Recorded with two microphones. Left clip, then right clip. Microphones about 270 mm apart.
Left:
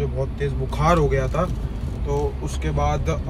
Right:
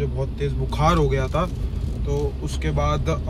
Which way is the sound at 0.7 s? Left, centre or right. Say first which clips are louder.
Left 1 dB; centre.